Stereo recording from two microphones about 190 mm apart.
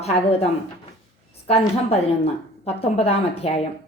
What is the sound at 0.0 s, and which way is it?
Speech, 35° left (ahead or behind).